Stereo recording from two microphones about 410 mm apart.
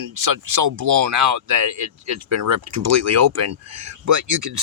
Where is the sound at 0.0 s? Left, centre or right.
Right.